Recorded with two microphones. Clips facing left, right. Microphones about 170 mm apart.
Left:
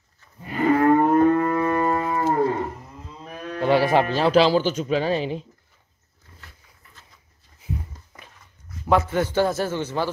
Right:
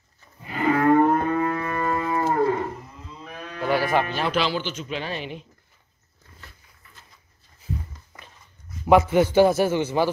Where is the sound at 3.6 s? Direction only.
25° left (ahead or behind).